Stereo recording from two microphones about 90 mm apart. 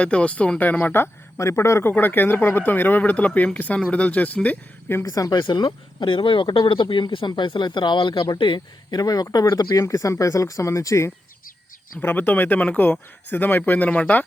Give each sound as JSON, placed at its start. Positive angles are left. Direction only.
{"t": 0.0, "sound": "speech", "side_deg": 10}
{"t": 1.4, "sound": "speech", "side_deg": 35}
{"t": 5.0, "sound": "speech", "side_deg": 40}
{"t": 5.5, "sound": "speech", "side_deg": 60}
{"t": 6.8, "sound": "speech", "side_deg": 60}
{"t": 11.9, "sound": "speech", "side_deg": 20}